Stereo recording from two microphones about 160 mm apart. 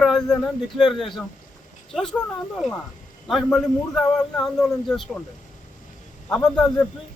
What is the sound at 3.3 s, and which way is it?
A man's voice, centre (ahead or behind).